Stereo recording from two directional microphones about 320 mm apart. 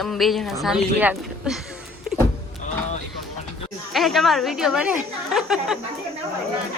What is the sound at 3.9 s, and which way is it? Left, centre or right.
A woman's voice, centre.